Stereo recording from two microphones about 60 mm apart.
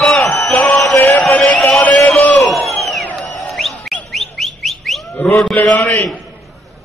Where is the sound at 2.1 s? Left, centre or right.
Left.